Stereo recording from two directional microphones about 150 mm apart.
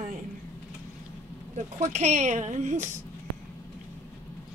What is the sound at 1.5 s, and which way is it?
Speech, 50° right (ahead or behind).